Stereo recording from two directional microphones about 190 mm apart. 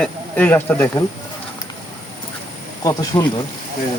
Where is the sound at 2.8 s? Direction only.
20° left (ahead or behind).